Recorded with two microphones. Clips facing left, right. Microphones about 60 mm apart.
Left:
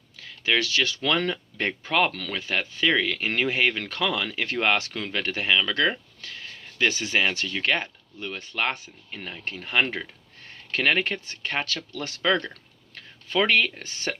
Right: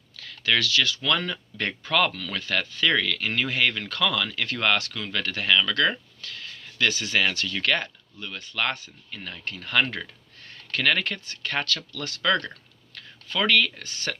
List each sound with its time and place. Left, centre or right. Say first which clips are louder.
0.2 s speech: even; left